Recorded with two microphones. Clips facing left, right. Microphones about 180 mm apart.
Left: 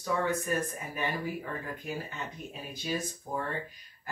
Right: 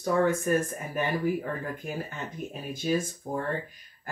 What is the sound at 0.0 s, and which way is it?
Speech, 50° right (ahead or behind).